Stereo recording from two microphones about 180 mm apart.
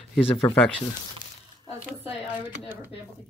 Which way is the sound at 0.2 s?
30° left (ahead or behind).